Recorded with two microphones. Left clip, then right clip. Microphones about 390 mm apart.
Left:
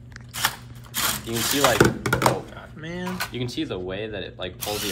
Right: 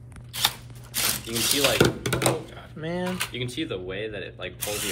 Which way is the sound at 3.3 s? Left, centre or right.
Left.